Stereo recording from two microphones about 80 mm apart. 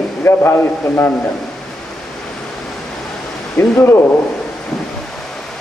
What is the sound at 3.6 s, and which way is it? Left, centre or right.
Speech, left.